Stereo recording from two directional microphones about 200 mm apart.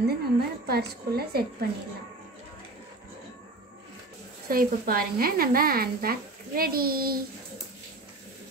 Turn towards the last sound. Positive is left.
turn(degrees=-45)  # may be behind; listen again after turning